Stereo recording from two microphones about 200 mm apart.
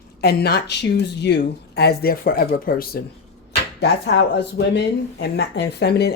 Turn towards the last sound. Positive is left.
turn(degrees=55)  # may be behind; listen again after turning